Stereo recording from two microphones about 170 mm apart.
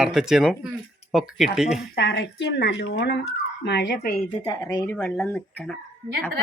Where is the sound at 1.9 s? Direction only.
90° left.